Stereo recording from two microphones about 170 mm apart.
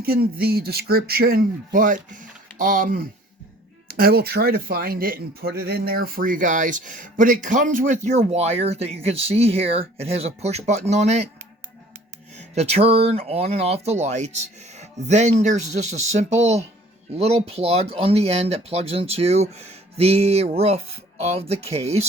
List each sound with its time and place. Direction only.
0.0 s speech: 65° right (ahead or behind); by 11.3 s 40° right (ahead or behind)
12.3 s speech: 40° right (ahead or behind)